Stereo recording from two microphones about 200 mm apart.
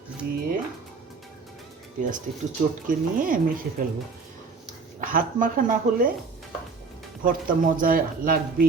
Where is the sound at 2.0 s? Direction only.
40° right (ahead or behind).